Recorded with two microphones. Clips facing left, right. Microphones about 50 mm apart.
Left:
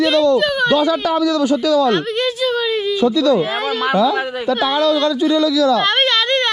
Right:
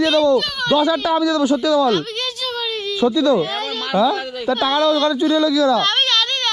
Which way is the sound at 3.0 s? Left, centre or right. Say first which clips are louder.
Even; right.